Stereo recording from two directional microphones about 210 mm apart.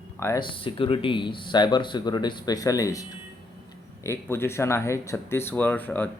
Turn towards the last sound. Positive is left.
turn(degrees=10)  # may be behind; listen again after turning